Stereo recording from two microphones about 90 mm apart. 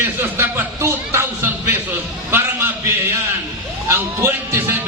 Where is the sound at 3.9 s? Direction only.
25° right (ahead or behind).